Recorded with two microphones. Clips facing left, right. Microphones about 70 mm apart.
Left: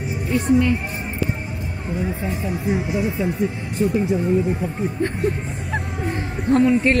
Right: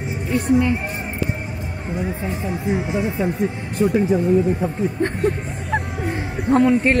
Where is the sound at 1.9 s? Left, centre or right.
Right.